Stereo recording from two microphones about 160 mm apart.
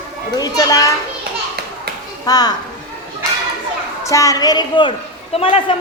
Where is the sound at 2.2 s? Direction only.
25° left (ahead or behind).